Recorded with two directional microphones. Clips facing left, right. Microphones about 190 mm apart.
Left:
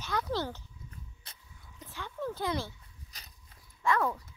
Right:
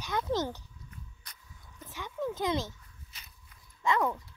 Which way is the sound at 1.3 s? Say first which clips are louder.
Even; 30° left (ahead or behind).